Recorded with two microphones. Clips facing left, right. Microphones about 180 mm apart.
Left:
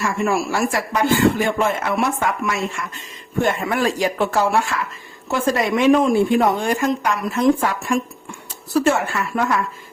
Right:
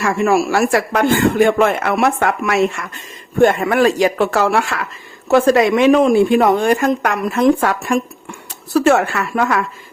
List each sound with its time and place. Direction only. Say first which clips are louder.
0.0 s speech: right 5 dB; 75° right (ahead or behind)
3.4 s speech: right 8 dB; 60° right (ahead or behind); by 9.6 s 80° right